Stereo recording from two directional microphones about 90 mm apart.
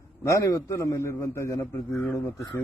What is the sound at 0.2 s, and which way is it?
Speech, 35° left (ahead or behind).